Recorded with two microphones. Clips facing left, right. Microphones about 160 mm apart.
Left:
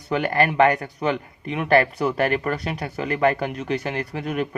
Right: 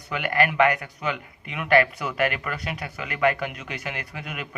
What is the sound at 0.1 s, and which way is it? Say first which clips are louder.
Speech: left 3 dB; 35° left (ahead or behind).